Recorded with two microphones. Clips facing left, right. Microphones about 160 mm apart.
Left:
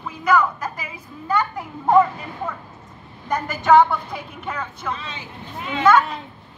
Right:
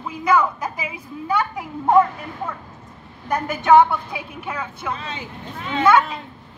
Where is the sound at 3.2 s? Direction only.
5° right (ahead or behind).